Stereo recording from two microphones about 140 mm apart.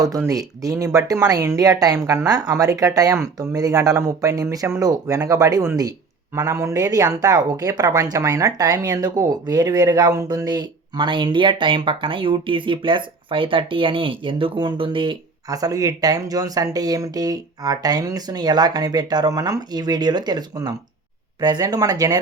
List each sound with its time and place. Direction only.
0.0 s speech: 25° right (ahead or behind)
15.4 s speech: 25° right (ahead or behind)